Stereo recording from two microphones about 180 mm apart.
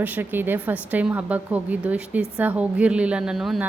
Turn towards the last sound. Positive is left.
turn(degrees=0)  # may be behind; listen again after turning